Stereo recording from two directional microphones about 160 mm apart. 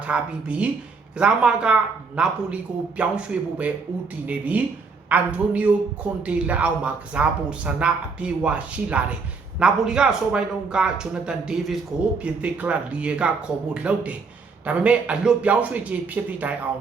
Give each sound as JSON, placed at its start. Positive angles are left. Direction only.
{"t": 0.1, "sound": "speech", "side_deg": -10}